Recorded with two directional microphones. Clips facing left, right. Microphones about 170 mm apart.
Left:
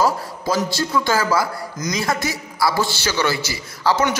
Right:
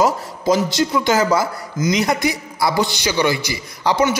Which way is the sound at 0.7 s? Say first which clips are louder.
Right 3 dB; 20° right (ahead or behind).